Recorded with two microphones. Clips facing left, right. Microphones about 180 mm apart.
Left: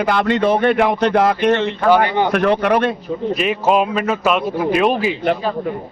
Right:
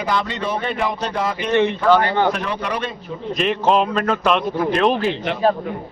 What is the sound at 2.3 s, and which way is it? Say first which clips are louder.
Speech: left 10 dB; 60° left (ahead or behind).